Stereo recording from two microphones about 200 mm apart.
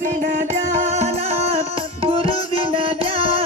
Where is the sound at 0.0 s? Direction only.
40° right (ahead or behind).